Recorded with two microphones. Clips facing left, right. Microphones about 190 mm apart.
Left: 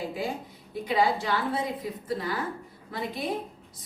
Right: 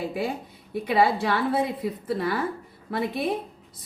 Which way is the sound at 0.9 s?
65° right (ahead or behind).